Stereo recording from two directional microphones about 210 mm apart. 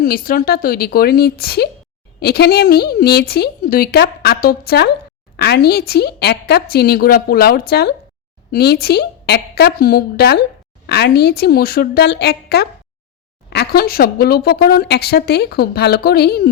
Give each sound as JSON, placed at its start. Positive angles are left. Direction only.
{"t": 0.0, "sound": "speech", "side_deg": 45}